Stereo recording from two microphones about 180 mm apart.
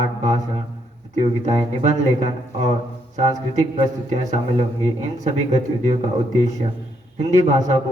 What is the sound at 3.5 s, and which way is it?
Speech, 40° right (ahead or behind).